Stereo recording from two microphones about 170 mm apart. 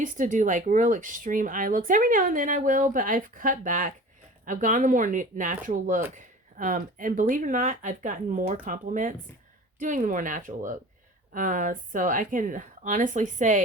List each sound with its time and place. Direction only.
0.0 s speech: 50° right (ahead or behind)